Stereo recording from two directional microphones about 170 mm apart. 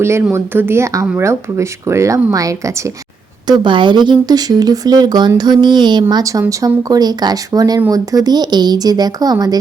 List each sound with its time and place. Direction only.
0.0 s speech: 15° right (ahead or behind)